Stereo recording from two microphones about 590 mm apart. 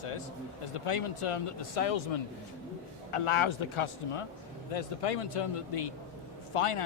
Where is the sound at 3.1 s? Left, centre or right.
Left.